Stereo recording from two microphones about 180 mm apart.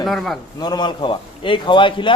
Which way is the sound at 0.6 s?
25° left (ahead or behind).